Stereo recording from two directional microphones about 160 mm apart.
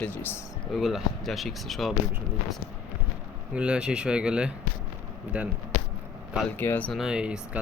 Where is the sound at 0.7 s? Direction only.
Centre (ahead or behind).